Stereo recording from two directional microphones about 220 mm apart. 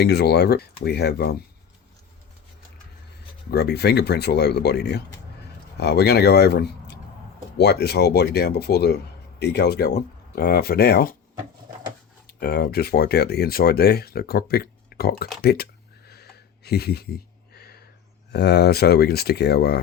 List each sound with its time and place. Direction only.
0.0 s speech: 50° left (ahead or behind)
3.5 s speech: 50° left (ahead or behind)
12.4 s speech: 45° left (ahead or behind)
16.6 s a sound: 45° left (ahead or behind)
18.3 s speech: 50° left (ahead or behind)